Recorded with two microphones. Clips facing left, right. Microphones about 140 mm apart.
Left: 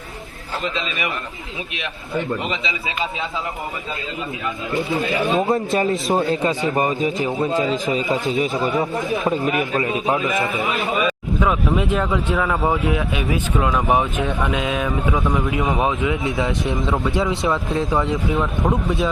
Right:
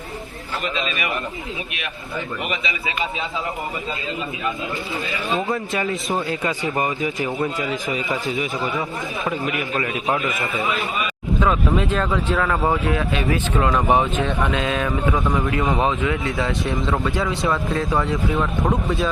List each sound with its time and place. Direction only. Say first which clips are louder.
0.6 s speech: even; 25° left (ahead or behind)
2.1 s speech: left 4 dB; 25° left (ahead or behind)
5.5 s a man's voice: left 5 dB; 30° left (ahead or behind)
11.3 s speech: right 1 dB; 5° left (ahead or behind)
16.2 s speech: left 2 dB; 20° left (ahead or behind)
18.3 s speech: left 1 dB; centre (ahead or behind)